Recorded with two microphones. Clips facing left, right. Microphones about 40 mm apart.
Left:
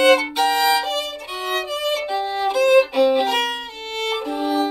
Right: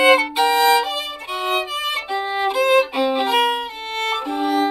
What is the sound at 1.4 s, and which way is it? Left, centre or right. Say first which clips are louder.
Violin: right 1 dB; centre.